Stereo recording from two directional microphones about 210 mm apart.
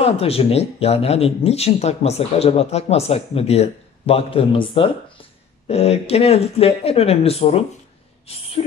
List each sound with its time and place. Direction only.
0.0 s speech: 30° left (ahead or behind)